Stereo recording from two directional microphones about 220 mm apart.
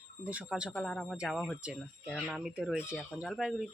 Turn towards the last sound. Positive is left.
turn(degrees=-5)  # may be behind; listen again after turning